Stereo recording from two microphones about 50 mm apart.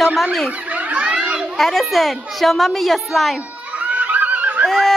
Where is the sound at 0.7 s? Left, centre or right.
Right.